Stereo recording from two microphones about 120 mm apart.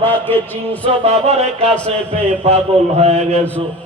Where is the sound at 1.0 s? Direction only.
60° right (ahead or behind).